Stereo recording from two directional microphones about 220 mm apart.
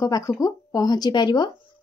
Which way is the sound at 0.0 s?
15° left (ahead or behind).